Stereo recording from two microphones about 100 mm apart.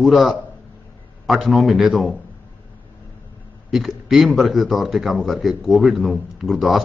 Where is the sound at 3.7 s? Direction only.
Centre (ahead or behind).